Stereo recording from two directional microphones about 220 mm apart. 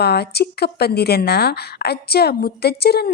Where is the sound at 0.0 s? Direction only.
45° left (ahead or behind).